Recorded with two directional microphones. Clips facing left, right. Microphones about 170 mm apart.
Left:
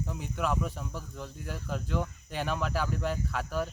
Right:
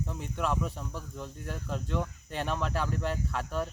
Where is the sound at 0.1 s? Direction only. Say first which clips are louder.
Left 1 dB; centre (ahead or behind).